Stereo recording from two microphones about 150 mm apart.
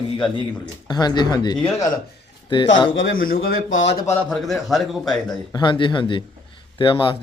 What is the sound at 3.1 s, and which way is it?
Speech, 70° left (ahead or behind).